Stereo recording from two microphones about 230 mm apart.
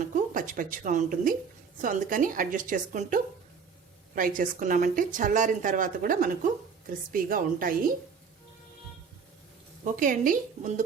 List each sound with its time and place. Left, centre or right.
0.0 s speech: right
9.8 s speech: right